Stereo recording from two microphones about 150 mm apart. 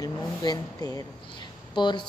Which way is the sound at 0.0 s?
25° left (ahead or behind).